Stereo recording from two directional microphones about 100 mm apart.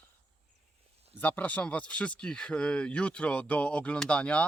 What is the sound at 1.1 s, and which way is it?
Speech, 15° left (ahead or behind).